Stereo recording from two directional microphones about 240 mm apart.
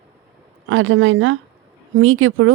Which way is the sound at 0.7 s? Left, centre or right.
Right.